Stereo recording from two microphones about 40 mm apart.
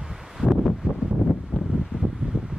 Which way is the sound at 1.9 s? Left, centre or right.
Right.